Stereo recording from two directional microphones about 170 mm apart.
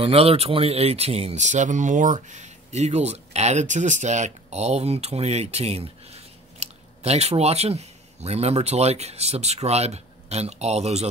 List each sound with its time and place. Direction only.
0.0 s speech: 35° right (ahead or behind)